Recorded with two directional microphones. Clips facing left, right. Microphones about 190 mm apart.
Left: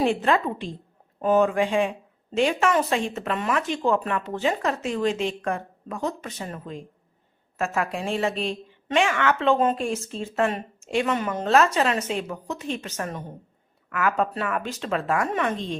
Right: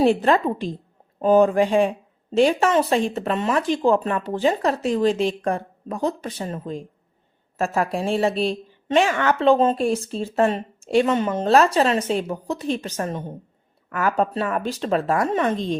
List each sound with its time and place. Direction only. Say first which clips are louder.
0.0 s a woman's voice: right 4 dB; 35° right (ahead or behind)